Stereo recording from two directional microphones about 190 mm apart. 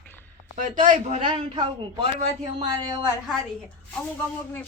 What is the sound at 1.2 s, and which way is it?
A woman's voice, 30° right (ahead or behind).